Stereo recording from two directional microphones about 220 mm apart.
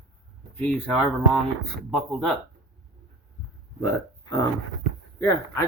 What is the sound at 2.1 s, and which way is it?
Speech, centre (ahead or behind).